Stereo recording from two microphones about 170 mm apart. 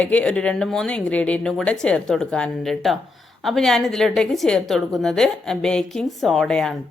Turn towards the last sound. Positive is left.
turn(degrees=5)  # may be behind; listen again after turning